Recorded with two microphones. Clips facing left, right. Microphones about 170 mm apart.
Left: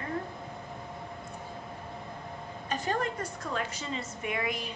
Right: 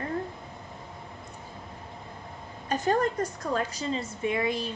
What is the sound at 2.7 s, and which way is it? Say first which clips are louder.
A woman's voice: right 6 dB; 40° right (ahead or behind).